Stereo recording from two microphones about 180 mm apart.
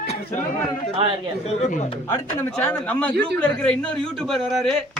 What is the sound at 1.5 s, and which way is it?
Speech, 40° left (ahead or behind).